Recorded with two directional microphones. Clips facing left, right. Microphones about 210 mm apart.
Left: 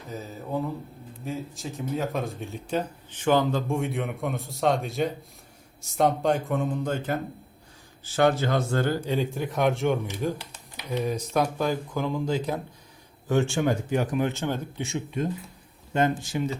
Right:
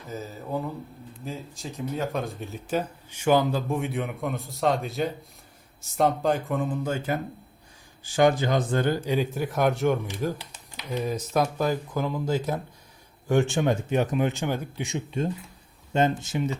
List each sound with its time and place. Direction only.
0.1 s speech: centre (ahead or behind)
15.9 s speech: 25° right (ahead or behind)